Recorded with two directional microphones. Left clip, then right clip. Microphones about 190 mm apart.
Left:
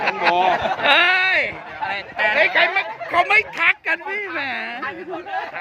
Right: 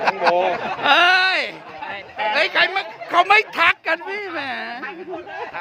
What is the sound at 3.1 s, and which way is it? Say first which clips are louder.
Speech: right 2 dB; 30° right (ahead or behind).